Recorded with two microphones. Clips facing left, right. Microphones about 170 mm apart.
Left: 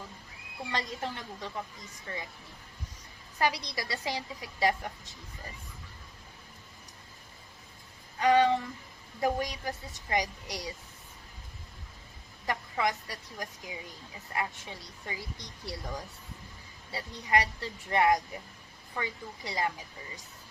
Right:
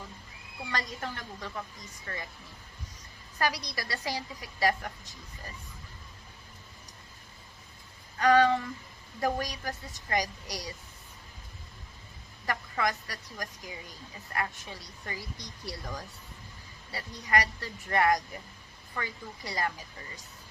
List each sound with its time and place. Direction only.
0.7 s a woman's voice: 25° left (ahead or behind)
3.3 s a woman's voice: 20° left (ahead or behind)
8.2 s a woman's voice: 20° left (ahead or behind)
12.5 s a woman's voice: 20° left (ahead or behind)